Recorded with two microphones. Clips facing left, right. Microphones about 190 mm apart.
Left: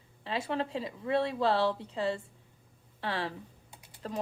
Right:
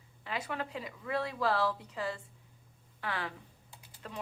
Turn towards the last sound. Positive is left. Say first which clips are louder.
# left 7 dB
turn(degrees=35)  # may be behind; listen again after turning